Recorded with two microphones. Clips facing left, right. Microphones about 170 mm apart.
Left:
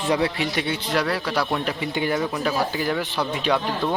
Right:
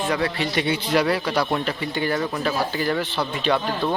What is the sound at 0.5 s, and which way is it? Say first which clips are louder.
Speech: right 3 dB; centre (ahead or behind).